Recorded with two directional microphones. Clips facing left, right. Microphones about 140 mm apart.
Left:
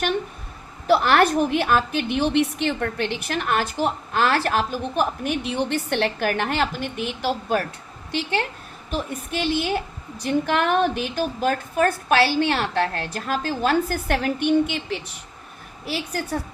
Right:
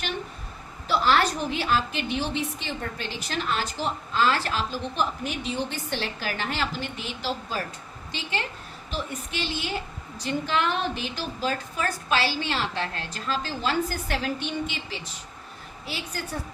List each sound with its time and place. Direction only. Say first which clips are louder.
0.9 s a woman's voice: left 5 dB; 60° left (ahead or behind)